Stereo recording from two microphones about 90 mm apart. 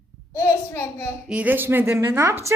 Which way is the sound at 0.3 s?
30° left (ahead or behind).